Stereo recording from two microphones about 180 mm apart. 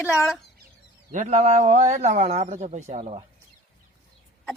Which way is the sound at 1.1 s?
45° right (ahead or behind).